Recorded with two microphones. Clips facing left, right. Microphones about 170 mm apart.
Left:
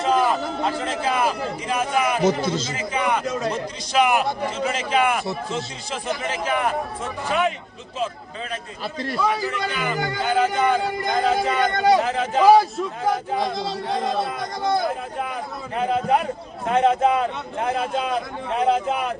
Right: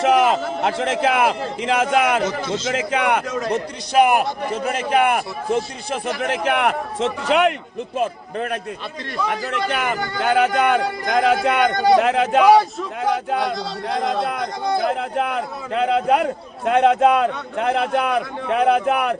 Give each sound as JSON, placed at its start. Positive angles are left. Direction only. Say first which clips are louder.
{"t": 0.0, "sound": "a sound", "louder": "right 4 dB", "side_deg": -85}
{"t": 1.0, "sound": "a man's voice", "louder": "right 3 dB", "side_deg": -80}
{"t": 2.6, "sound": "a man's voice", "louder": "right 4 dB", "side_deg": -75}
{"t": 3.5, "sound": "a man's voice", "louder": "right 4 dB", "side_deg": -55}
{"t": 7.9, "sound": "a man's voice", "louder": "right 5 dB", "side_deg": -60}
{"t": 9.3, "sound": "a man's voice", "louder": "right 2 dB", "side_deg": -70}